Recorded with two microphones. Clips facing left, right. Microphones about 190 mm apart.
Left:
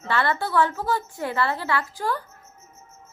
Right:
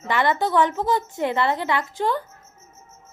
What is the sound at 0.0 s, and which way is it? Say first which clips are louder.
A woman's voice: right 3 dB; 15° right (ahead or behind).